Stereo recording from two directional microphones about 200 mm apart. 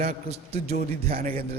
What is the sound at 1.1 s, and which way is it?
Speech, 45° right (ahead or behind).